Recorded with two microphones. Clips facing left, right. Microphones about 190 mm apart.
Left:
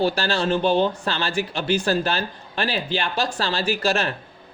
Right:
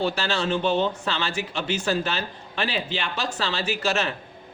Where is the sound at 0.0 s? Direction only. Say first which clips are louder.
Left 3 dB; 35° left (ahead or behind).